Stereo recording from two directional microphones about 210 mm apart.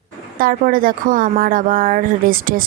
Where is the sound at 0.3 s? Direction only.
40° right (ahead or behind).